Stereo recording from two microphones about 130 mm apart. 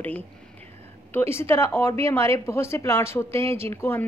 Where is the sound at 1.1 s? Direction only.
20° left (ahead or behind).